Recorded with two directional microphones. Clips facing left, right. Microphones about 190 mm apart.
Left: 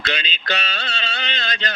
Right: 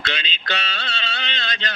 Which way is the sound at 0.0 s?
45° left (ahead or behind).